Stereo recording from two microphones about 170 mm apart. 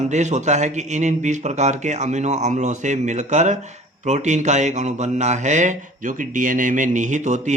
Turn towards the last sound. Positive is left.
turn(degrees=-45)  # may be behind; listen again after turning